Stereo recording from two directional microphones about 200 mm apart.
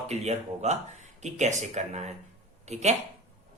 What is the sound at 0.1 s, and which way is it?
Speech, 35° right (ahead or behind).